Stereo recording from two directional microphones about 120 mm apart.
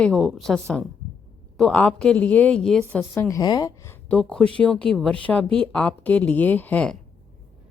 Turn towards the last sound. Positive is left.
turn(degrees=10)  # may be behind; listen again after turning